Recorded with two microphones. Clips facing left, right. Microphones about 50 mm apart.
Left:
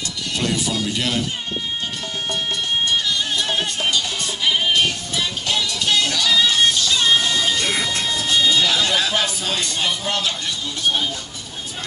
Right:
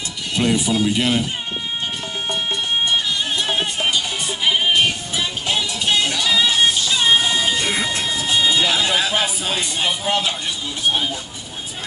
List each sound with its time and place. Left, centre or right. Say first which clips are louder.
0.3 s speech: right 4 dB; centre
2.9 s music: right 1 dB; centre